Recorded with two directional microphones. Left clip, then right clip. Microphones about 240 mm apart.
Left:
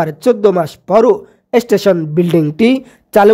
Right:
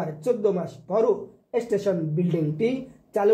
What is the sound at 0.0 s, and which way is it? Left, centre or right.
Speech, left.